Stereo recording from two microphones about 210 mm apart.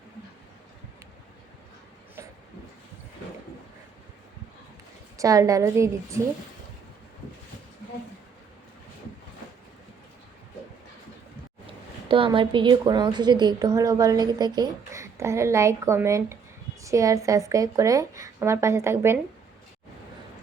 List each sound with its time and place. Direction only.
5.1 s a woman's voice: 15° right (ahead or behind)
12.0 s a woman's voice: 25° right (ahead or behind)